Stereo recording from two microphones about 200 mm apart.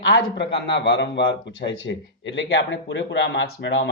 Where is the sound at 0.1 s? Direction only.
60° left (ahead or behind).